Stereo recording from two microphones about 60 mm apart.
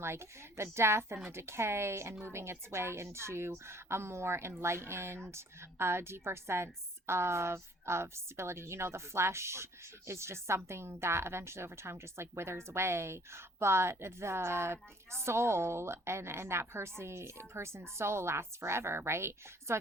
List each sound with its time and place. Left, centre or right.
0.0 s a woman's voice: right